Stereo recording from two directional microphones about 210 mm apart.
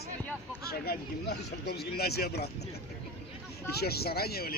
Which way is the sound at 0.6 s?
50° left (ahead or behind).